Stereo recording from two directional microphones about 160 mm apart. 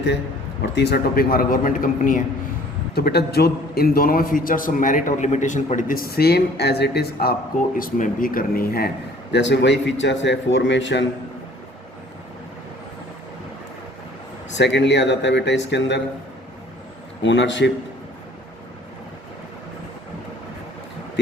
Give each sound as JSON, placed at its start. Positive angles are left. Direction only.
{"t": 0.6, "sound": "a man's voice", "side_deg": 90}
{"t": 2.9, "sound": "a man's voice", "side_deg": 80}
{"t": 7.8, "sound": "speech", "side_deg": 55}
{"t": 9.3, "sound": "a man's voice", "side_deg": 90}
{"t": 14.5, "sound": "a man's voice", "side_deg": 90}
{"t": 17.2, "sound": "a man's voice", "side_deg": 90}